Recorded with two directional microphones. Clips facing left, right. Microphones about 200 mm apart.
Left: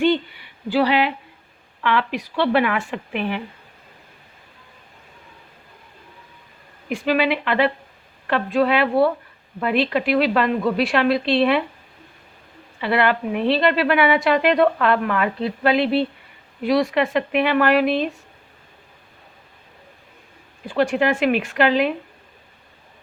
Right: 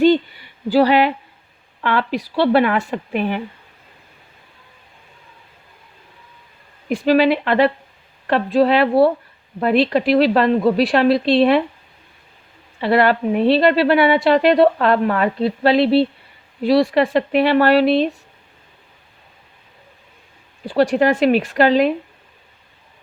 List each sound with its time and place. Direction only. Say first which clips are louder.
0.0 s a sound: right 5 dB; 40° right (ahead or behind)
1.8 s a woman's voice: right 2 dB; 40° right (ahead or behind)
6.8 s a woman's voice: right 6 dB; 40° right (ahead or behind)
12.8 s a woman's voice: right 4 dB; 40° right (ahead or behind)
20.7 s a woman's voice: right 4 dB; 35° right (ahead or behind)